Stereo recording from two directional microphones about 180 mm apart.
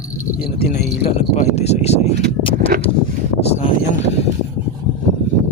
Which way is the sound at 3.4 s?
35° left (ahead or behind).